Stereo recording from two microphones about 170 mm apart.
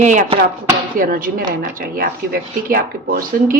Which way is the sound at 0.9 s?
55° right (ahead or behind).